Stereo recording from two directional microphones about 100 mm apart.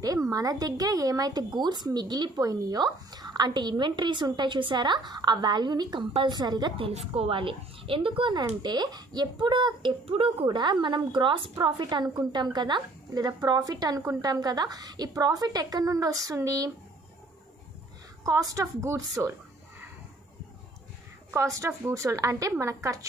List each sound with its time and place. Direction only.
0.0 s a woman's voice: 35° right (ahead or behind)
6.8 s a woman's voice: 85° right; by 11.5 s 60° right (ahead or behind)
11.5 s a woman's voice: 45° right (ahead or behind)
18.2 s a woman's voice: 35° right (ahead or behind)
21.3 s a woman's voice: 30° right (ahead or behind)